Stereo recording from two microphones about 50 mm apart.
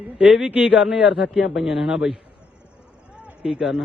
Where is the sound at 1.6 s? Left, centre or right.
Centre.